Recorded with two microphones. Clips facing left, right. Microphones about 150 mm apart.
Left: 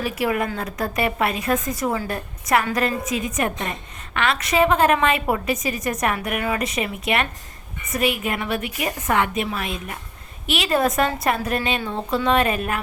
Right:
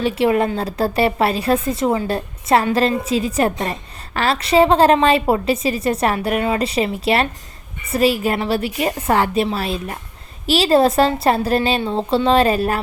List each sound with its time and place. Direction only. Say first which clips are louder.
0.0 s a woman's voice: right 6 dB; 25° right (ahead or behind)